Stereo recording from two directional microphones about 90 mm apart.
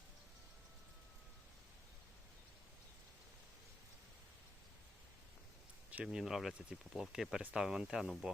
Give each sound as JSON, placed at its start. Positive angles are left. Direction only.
{"t": 5.9, "sound": "speech", "side_deg": -20}
{"t": 6.1, "sound": "speech", "side_deg": -5}